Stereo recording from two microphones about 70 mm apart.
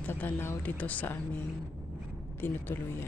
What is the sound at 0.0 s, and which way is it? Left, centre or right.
Speech, left.